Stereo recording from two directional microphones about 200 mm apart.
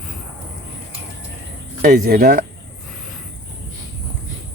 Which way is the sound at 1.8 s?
45° right (ahead or behind).